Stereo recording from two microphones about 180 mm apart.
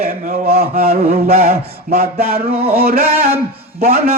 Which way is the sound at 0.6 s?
55° right (ahead or behind).